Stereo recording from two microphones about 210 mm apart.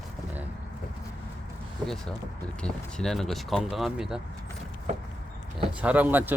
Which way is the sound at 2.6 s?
5° left (ahead or behind).